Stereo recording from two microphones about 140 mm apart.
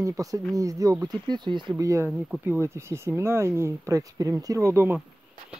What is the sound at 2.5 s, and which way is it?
Speech, 20° right (ahead or behind).